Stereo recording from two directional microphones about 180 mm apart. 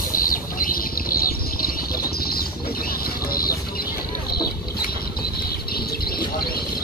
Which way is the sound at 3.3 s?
55° left (ahead or behind).